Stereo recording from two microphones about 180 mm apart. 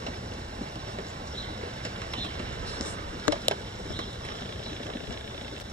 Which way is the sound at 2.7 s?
10° left (ahead or behind).